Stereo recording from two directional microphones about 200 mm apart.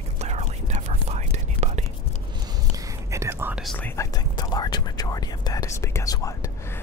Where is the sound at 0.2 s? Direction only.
35° right (ahead or behind).